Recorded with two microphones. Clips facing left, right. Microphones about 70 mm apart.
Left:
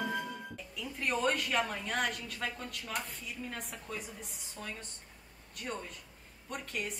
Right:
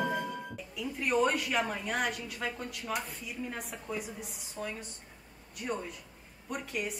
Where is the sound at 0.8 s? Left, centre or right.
Centre.